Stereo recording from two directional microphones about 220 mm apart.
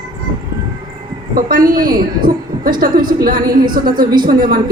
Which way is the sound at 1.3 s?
40° right (ahead or behind).